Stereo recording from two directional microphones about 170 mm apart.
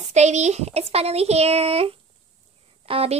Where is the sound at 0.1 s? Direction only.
40° right (ahead or behind).